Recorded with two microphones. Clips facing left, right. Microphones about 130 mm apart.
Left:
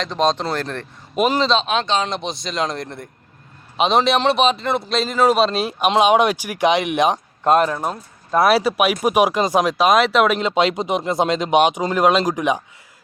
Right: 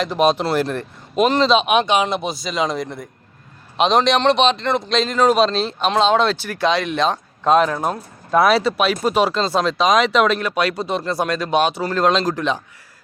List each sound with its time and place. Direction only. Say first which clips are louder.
0.0 s speech: right 2 dB; 5° right (ahead or behind)
1.1 s speech: right 2 dB; 5° left (ahead or behind)
1.5 s speech: right 3 dB; 15° right (ahead or behind); by 10.4 s 10° left (ahead or behind)
10.4 s speech: left 2 dB; 20° left (ahead or behind)